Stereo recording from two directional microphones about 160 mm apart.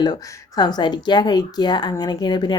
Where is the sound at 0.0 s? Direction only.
25° left (ahead or behind).